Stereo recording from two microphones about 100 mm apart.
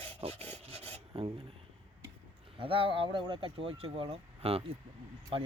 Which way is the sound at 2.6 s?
65° right (ahead or behind).